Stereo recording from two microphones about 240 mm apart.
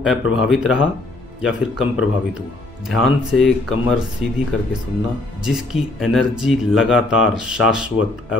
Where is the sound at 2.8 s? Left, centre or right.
Centre.